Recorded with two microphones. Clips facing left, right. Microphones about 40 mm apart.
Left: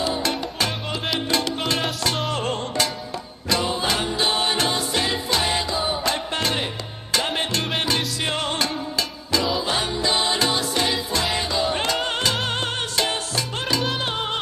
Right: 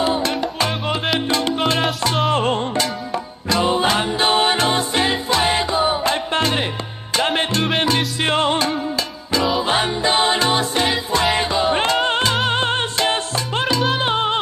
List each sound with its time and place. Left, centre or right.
0.0 s music: right
0.8 s music: centre
2.3 s music: right
7.5 s salsa music: centre
8.2 s music: right
9.3 s music: centre
9.6 s music: right
12.4 s salsa music: right
13.9 s music: right